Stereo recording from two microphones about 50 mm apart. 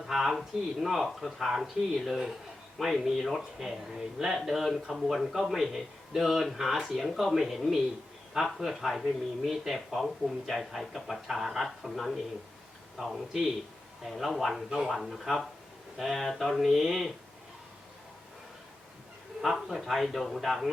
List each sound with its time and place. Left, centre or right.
0.0 s speech: centre
14.7 s a man's voice: centre
14.9 s speech: centre
19.4 s speech: centre